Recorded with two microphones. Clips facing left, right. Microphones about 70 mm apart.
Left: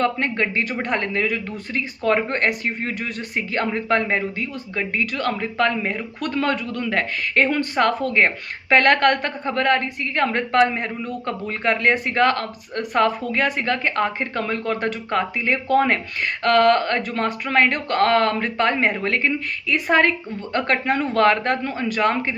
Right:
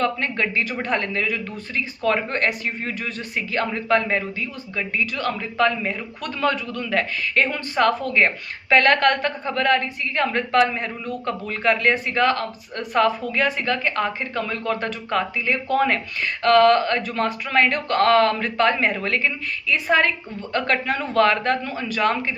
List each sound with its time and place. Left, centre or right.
0.0 s a man's voice: left
9.5 s a man's voice: left